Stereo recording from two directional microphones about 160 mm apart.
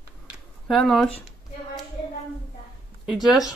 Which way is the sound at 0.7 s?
Centre (ahead or behind).